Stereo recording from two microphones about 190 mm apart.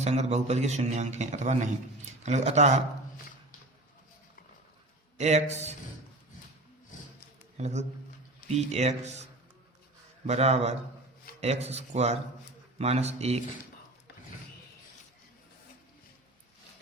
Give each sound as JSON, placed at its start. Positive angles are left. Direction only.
{"t": 0.0, "sound": "a man's voice", "side_deg": -35}
{"t": 5.1, "sound": "a man's voice", "side_deg": -35}
{"t": 7.5, "sound": "a man's voice", "side_deg": -35}
{"t": 10.2, "sound": "a man's voice", "side_deg": -35}